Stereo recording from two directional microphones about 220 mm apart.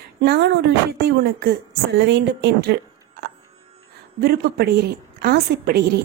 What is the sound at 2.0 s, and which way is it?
Speech, 50° right (ahead or behind).